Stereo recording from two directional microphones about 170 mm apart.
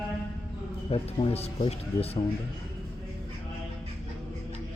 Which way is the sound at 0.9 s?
30° left (ahead or behind).